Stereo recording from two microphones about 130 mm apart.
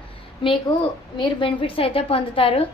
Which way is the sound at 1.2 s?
40° left (ahead or behind).